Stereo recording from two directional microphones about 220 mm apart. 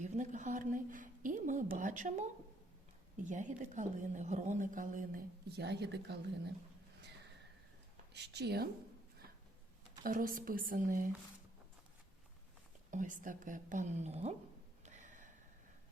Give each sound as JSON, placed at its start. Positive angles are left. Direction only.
{"t": 0.0, "sound": "speech", "side_deg": -35}
{"t": 8.1, "sound": "speech", "side_deg": -50}
{"t": 10.0, "sound": "speech", "side_deg": -40}
{"t": 12.9, "sound": "speech", "side_deg": -35}
{"t": 14.8, "sound": "a sound", "side_deg": -35}